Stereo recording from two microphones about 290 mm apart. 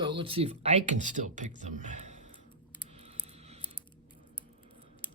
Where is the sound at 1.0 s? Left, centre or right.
Right.